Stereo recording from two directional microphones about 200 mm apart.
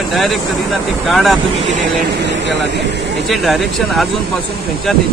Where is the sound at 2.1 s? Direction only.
60° right (ahead or behind).